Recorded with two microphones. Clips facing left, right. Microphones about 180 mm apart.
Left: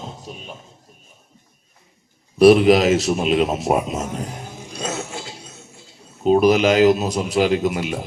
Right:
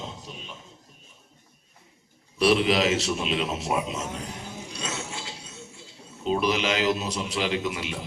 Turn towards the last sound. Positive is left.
turn(degrees=45)  # may be behind; listen again after turning